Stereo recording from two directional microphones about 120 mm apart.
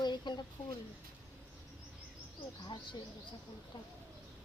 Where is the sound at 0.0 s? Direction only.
35° left (ahead or behind).